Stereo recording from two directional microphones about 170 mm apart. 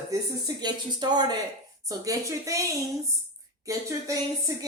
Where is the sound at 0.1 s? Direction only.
25° right (ahead or behind).